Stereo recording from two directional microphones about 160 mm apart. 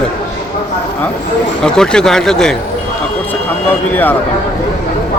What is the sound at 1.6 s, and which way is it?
Speech, 5° left (ahead or behind).